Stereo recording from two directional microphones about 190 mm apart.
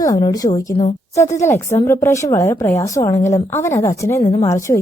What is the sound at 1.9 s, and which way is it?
Speech, 15° left (ahead or behind).